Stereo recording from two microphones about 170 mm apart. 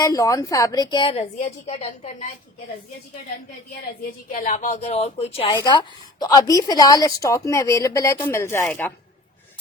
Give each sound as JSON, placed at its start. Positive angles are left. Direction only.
{"t": 0.0, "sound": "a woman's voice", "side_deg": 20}
{"t": 4.3, "sound": "a woman's voice", "side_deg": 50}
{"t": 5.5, "sound": "a woman's voice", "side_deg": 20}